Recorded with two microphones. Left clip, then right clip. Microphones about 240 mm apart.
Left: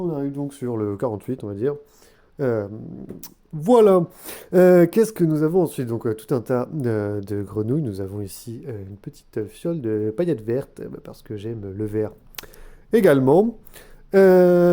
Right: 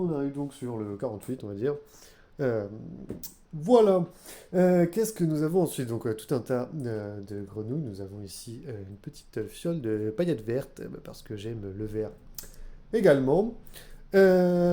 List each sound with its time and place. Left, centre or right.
0.0 s speech: left
3.2 s speech: left
11.9 s speech: left
13.7 s speech: left